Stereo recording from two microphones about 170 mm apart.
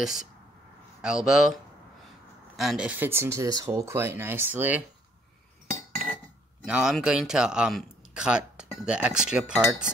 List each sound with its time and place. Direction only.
0.0 s speech: centre (ahead or behind)
6.6 s speech: 5° right (ahead or behind)